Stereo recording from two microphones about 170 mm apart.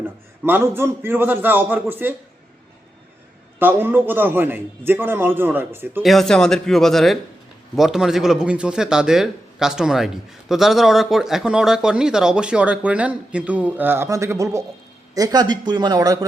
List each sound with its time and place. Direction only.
0.4 s a man's voice: 15° right (ahead or behind)
3.6 s a man's voice: 10° right (ahead or behind)
6.0 s speech: centre (ahead or behind); by 16.1 s 20° right (ahead or behind)